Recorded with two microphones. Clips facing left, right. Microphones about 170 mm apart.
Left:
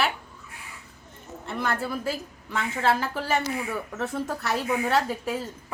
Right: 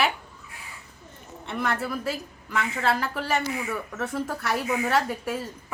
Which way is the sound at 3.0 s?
Centre (ahead or behind).